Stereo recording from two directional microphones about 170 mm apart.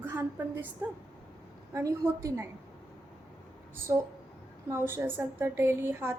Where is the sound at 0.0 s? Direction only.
10° right (ahead or behind).